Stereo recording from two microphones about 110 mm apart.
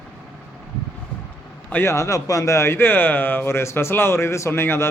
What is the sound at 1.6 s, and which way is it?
Speech, 20° left (ahead or behind).